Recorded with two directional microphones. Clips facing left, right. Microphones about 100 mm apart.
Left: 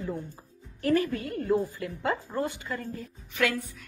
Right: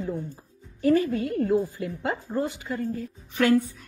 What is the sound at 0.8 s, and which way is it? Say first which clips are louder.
Speech: right 4 dB; 20° right (ahead or behind).